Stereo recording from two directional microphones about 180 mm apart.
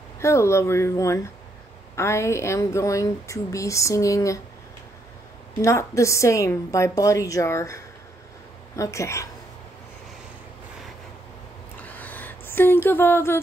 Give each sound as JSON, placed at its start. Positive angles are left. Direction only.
{"t": 0.2, "sound": "a woman's voice", "side_deg": 15}
{"t": 5.6, "sound": "a woman's voice", "side_deg": 15}
{"t": 11.8, "sound": "a sound", "side_deg": 10}